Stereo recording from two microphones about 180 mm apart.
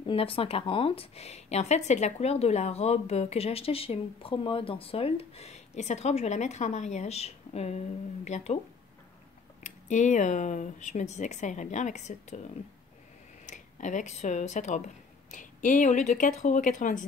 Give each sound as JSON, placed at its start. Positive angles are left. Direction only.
{"t": 0.0, "sound": "speech", "side_deg": 30}
{"t": 9.6, "sound": "speech", "side_deg": 40}
{"t": 13.5, "sound": "speech", "side_deg": 45}